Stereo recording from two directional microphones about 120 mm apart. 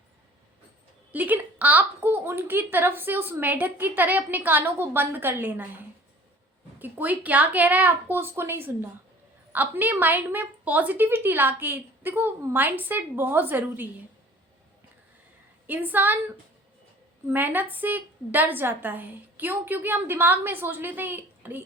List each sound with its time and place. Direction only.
1.1 s a woman's voice: 15° right (ahead or behind)
15.6 s a woman's voice: 15° right (ahead or behind)